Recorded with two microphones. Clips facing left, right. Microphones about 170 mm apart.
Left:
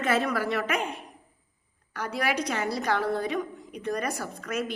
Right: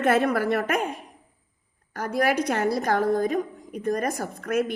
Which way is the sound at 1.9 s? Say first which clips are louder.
Right 5 dB; 50° right (ahead or behind).